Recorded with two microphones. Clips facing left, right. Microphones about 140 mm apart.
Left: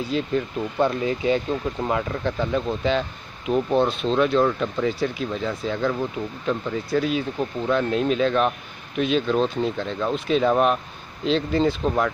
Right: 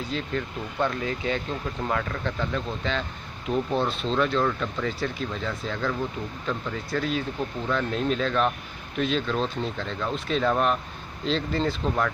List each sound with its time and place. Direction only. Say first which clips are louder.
0.1 s speech: left 7 dB; 15° left (ahead or behind)
4.0 s speech: left 5 dB; 10° left (ahead or behind)